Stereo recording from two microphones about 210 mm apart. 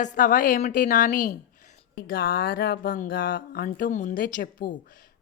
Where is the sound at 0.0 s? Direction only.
35° left (ahead or behind).